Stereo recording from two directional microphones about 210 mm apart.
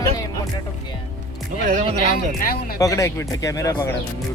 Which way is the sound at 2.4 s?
45° left (ahead or behind).